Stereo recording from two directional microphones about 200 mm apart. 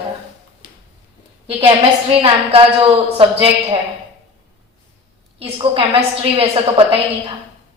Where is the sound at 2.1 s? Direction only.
30° right (ahead or behind).